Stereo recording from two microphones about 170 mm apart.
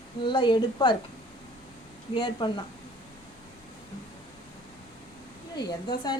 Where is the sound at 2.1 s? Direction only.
25° left (ahead or behind).